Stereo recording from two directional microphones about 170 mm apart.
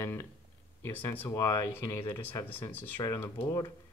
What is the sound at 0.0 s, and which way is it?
Speech, 15° left (ahead or behind).